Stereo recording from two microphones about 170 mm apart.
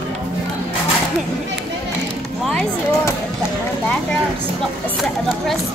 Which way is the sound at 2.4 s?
5° left (ahead or behind).